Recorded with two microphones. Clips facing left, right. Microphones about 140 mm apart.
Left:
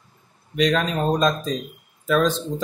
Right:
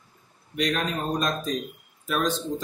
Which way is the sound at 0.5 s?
90° left.